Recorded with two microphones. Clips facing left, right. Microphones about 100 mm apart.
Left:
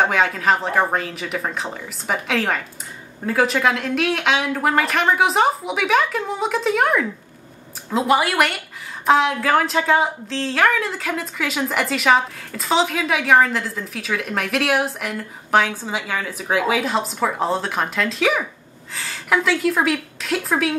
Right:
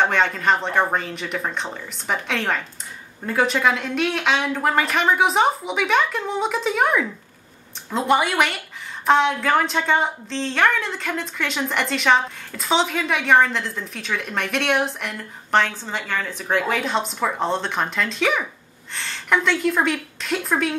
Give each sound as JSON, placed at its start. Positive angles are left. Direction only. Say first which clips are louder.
{"t": 0.0, "sound": "a woman's voice", "louder": "left 1 dB", "side_deg": 5}